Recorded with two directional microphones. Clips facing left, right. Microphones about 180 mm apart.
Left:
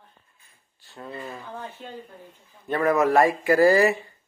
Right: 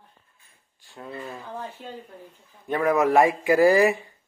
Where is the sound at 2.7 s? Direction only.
15° right (ahead or behind).